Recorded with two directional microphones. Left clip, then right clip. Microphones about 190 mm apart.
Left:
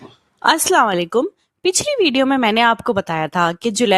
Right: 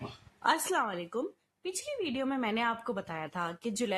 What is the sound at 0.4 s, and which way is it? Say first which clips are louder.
A woman's voice: left 15 dB; 55° left (ahead or behind).